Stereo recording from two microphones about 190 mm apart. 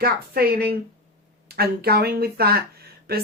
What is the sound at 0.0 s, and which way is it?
A woman's voice, 55° right (ahead or behind).